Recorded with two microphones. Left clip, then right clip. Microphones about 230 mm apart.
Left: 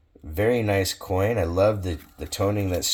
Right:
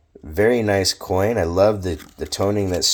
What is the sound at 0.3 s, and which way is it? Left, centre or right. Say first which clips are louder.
Speech: right 5 dB; right.